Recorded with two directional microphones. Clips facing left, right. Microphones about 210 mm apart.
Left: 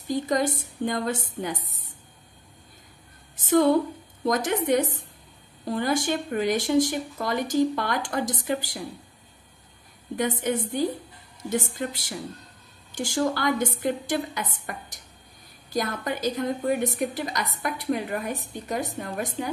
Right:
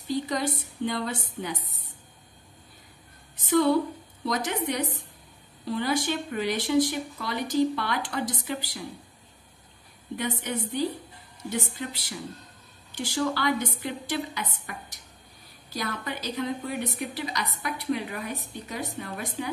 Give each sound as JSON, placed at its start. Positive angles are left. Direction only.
{"t": 0.1, "sound": "a woman's voice", "side_deg": 45}
{"t": 3.3, "sound": "a woman's voice", "side_deg": 50}
{"t": 10.1, "sound": "a woman's voice", "side_deg": 45}